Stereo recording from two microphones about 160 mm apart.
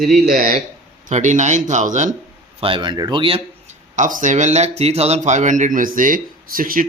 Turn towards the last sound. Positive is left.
turn(degrees=-60)  # may be behind; listen again after turning